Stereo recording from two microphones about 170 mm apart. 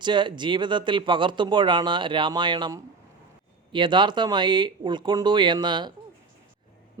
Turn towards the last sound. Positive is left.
turn(degrees=-25)  # may be behind; listen again after turning